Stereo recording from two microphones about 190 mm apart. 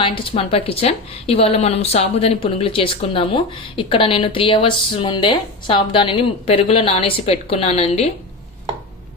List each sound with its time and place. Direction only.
0.3 s a woman's voice: 30° left (ahead or behind)